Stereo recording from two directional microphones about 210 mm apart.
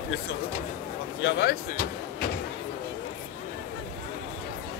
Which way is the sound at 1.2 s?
45° left (ahead or behind).